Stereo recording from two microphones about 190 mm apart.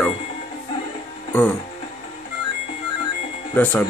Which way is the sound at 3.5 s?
10° left (ahead or behind).